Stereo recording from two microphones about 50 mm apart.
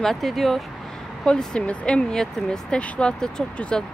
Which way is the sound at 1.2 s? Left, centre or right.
Centre.